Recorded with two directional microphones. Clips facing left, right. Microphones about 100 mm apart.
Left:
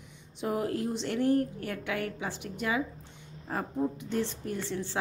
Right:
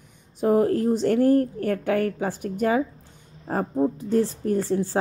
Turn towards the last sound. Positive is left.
turn(degrees=-40)  # may be behind; listen again after turning